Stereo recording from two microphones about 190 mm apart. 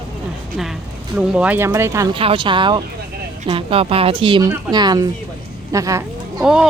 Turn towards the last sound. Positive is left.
turn(degrees=-5)  # may be behind; listen again after turning